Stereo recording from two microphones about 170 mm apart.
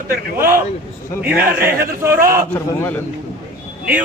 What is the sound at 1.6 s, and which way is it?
Speech, 15° right (ahead or behind).